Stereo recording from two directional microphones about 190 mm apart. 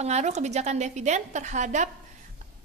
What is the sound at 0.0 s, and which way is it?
A woman's voice, 35° right (ahead or behind).